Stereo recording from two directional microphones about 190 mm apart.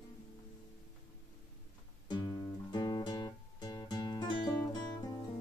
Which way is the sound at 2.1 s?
20° left (ahead or behind).